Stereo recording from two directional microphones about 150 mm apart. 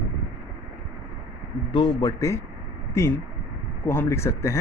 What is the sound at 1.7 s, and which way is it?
Speech, 25° left (ahead or behind).